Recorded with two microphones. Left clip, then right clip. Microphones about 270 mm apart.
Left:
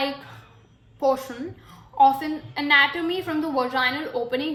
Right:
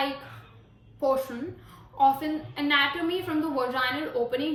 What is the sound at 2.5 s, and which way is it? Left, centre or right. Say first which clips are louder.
A woman's voice: left 6 dB; left.